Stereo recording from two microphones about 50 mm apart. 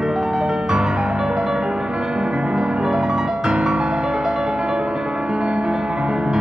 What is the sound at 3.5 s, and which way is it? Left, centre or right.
Music, right.